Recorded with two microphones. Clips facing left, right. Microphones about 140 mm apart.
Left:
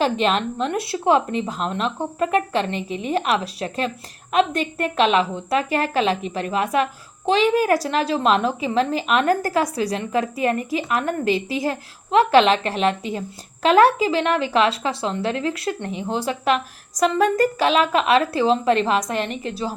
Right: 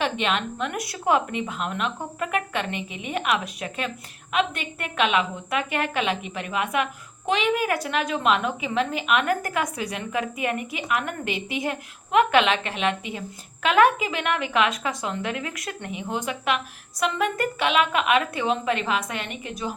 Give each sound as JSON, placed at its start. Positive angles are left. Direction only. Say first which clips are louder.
{"t": 0.0, "sound": "a woman's voice", "louder": "left 5 dB", "side_deg": 35}